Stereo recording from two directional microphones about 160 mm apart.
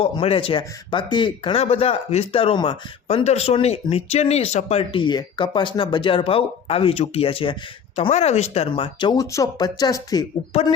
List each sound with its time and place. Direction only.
0.0 s speech: 35° left (ahead or behind)